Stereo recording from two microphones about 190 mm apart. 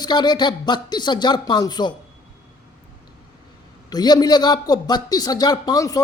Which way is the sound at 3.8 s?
20° left (ahead or behind).